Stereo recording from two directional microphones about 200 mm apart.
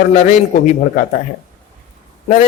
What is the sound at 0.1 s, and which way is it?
Speech, 40° left (ahead or behind).